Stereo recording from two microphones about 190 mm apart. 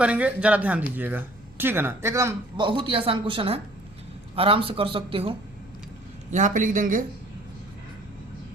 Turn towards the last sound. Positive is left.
turn(degrees=-45)  # may be behind; listen again after turning